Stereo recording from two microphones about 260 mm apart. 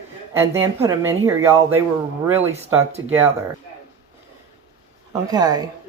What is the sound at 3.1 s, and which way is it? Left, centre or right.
Speech, centre.